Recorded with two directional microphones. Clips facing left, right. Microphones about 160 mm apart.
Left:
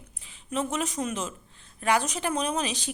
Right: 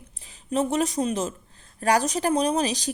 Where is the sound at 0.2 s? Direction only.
35° right (ahead or behind).